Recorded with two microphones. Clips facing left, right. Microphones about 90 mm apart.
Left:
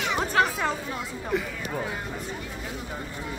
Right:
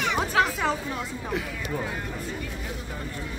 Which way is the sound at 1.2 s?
Centre (ahead or behind).